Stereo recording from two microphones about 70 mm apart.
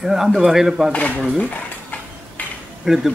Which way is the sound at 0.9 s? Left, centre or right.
Centre.